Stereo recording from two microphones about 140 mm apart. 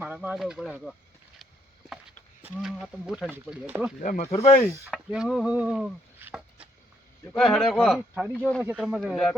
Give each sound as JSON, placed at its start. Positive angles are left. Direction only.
{"t": 0.0, "sound": "bird", "side_deg": -15}
{"t": 0.3, "sound": "speech", "side_deg": -5}
{"t": 2.6, "sound": "speech", "side_deg": 0}
{"t": 4.0, "sound": "speech", "side_deg": 70}
{"t": 4.3, "sound": "speech", "side_deg": 50}
{"t": 4.9, "sound": "a sound", "side_deg": -5}
{"t": 7.3, "sound": "speech", "side_deg": 5}